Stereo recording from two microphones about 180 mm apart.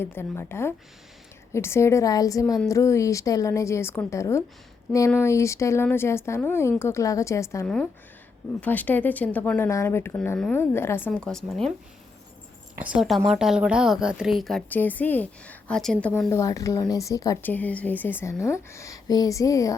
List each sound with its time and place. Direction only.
0.0 s speech: 15° left (ahead or behind)
12.8 s a woman's voice: 5° right (ahead or behind)
16.3 s speech: 20° left (ahead or behind)